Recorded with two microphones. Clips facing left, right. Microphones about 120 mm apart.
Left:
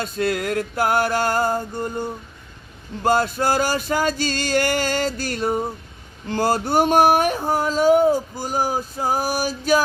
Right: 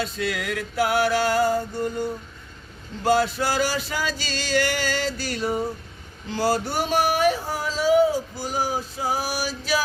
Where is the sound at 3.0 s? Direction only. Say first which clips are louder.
Left 2 dB; 45° left (ahead or behind).